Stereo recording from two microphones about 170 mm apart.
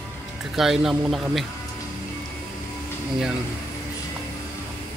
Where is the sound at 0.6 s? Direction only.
Centre (ahead or behind).